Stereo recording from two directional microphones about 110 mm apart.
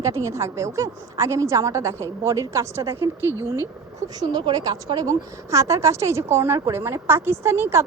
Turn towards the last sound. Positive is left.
turn(degrees=-25)  # may be behind; listen again after turning